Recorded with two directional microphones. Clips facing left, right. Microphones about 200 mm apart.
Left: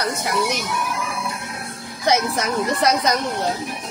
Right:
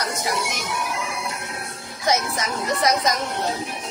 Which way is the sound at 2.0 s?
65° left (ahead or behind).